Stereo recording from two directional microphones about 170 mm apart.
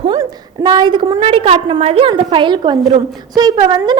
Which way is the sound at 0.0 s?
25° right (ahead or behind).